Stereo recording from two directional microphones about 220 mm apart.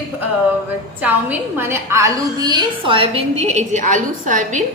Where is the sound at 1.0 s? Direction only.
10° right (ahead or behind).